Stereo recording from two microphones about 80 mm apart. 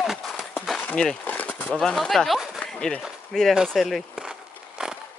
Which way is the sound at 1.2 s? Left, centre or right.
Left.